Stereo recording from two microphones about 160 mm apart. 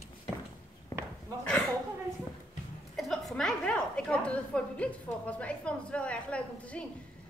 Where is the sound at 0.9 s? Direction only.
20° left (ahead or behind).